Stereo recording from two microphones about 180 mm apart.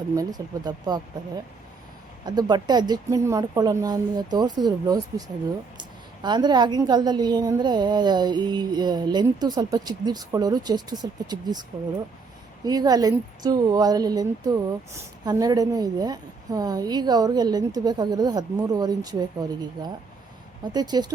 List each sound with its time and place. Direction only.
0.2 s a woman's voice: 20° right (ahead or behind)
2.2 s a woman's voice: 20° right (ahead or behind)
6.2 s a woman's voice: 25° right (ahead or behind)
12.6 s a woman's voice: 20° right (ahead or behind)